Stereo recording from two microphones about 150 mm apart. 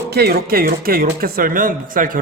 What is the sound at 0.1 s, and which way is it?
Speech, 90° right.